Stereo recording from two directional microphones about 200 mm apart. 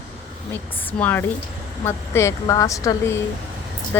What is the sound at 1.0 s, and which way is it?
A woman's voice, 10° left (ahead or behind).